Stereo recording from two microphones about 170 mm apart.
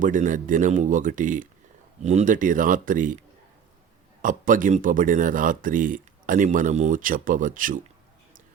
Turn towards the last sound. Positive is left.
turn(degrees=-50)  # may be behind; listen again after turning